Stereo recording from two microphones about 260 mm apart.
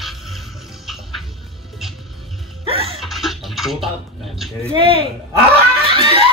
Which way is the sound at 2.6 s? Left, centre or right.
Right.